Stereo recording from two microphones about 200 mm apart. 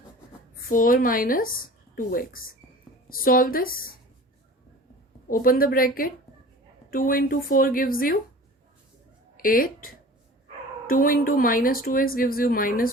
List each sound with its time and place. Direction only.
0.7 s speech: 45° left (ahead or behind)
5.3 s speech: 45° left (ahead or behind)
9.4 s speech: 45° left (ahead or behind)